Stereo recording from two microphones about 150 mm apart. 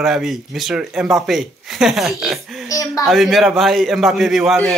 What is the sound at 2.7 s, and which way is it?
Speech, 20° left (ahead or behind).